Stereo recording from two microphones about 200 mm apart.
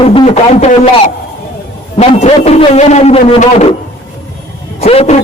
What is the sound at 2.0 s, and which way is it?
A man's voice, 30° left (ahead or behind).